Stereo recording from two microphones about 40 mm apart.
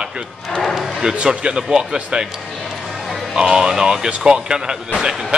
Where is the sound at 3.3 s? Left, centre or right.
Centre.